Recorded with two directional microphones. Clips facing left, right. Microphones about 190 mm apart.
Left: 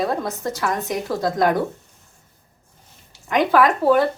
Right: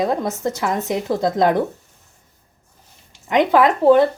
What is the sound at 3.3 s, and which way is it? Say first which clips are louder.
Speech: right 2 dB; 20° right (ahead or behind).